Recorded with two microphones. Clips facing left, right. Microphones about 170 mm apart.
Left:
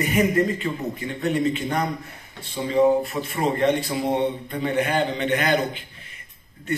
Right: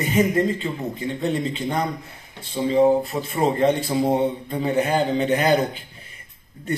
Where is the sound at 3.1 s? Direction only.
30° right (ahead or behind).